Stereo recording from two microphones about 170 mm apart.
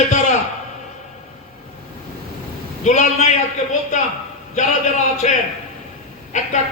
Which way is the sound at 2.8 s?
45° left (ahead or behind).